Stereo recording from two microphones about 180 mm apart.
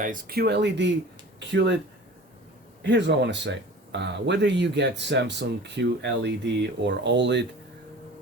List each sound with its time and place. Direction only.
0.0 s speech: 55° right (ahead or behind); by 1.7 s 75° right (ahead or behind)
2.8 s speech: 75° right (ahead or behind)